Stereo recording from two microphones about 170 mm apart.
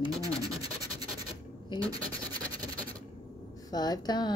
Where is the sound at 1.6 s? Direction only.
25° left (ahead or behind).